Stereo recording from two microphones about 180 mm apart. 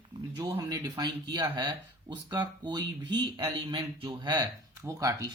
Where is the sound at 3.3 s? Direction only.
30° right (ahead or behind).